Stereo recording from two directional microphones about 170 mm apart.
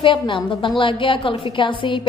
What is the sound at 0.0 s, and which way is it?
A woman's voice, 30° left (ahead or behind).